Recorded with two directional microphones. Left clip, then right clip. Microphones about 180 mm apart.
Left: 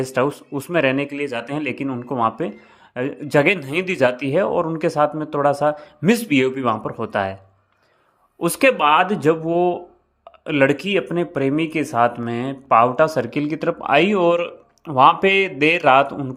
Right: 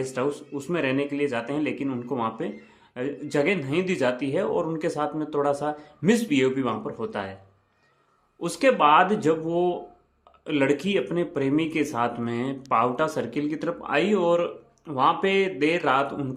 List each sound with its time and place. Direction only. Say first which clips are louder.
0.0 s speech: left 7 dB; 35° left (ahead or behind)
8.4 s speech: left 4 dB; 40° left (ahead or behind)